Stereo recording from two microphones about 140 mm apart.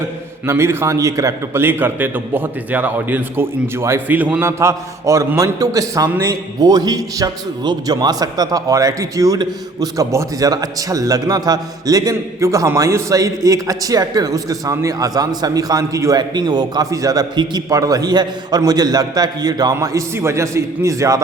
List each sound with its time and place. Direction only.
0.4 s a man's voice: 20° right (ahead or behind)